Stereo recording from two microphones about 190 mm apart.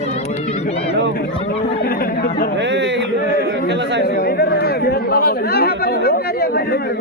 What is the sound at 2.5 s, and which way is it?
Speech, 70° right (ahead or behind).